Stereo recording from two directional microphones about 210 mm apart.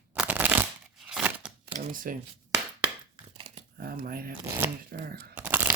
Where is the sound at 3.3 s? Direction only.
35° right (ahead or behind).